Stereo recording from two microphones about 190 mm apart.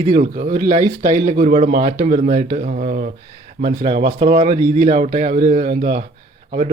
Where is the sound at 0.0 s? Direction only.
35° right (ahead or behind).